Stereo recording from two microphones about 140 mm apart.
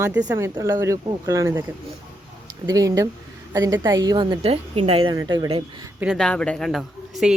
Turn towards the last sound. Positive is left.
turn(degrees=0)  # may be behind; listen again after turning